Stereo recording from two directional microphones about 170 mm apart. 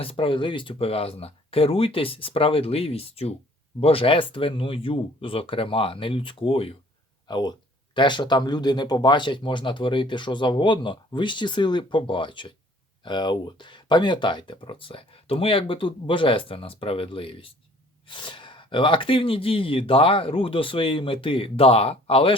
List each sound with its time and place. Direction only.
0.0 s speech: 30° left (ahead or behind)